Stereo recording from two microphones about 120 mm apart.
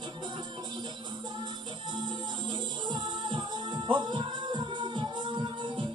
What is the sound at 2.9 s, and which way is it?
Music, 40° right (ahead or behind).